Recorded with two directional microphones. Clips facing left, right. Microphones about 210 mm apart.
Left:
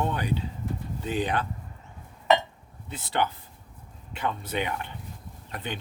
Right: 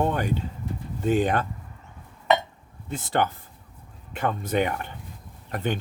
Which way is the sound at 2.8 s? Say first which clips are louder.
Right 3 dB; 50° right (ahead or behind).